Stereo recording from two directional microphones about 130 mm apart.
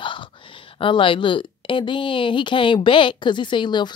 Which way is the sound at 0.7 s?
40° left (ahead or behind).